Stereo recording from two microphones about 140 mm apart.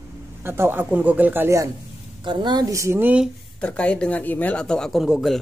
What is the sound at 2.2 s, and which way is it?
A woman's voice, 35° right (ahead or behind).